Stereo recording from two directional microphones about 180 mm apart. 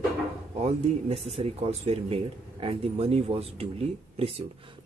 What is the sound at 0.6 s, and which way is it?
Speech, 35° right (ahead or behind).